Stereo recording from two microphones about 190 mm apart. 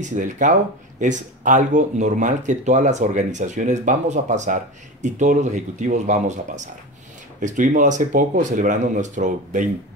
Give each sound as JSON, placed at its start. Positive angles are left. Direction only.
{"t": 0.0, "sound": "speech", "side_deg": -40}